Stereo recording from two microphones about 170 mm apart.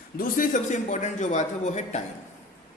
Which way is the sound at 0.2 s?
55° left (ahead or behind).